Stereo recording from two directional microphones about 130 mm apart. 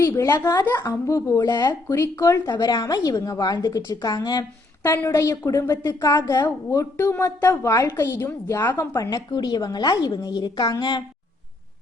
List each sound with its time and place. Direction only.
0.0 s a woman's voice: 25° left (ahead or behind)
6.7 s a woman's voice: 20° left (ahead or behind)
9.0 s a woman's voice: 30° left (ahead or behind)